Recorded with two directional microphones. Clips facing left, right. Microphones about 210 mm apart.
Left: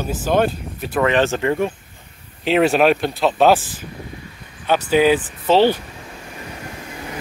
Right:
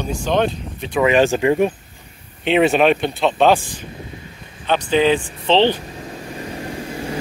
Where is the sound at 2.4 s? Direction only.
Centre (ahead or behind).